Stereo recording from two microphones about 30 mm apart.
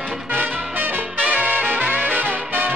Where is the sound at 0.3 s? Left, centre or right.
Right.